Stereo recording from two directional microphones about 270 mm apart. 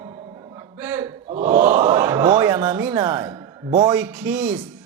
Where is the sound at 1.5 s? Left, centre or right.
Centre.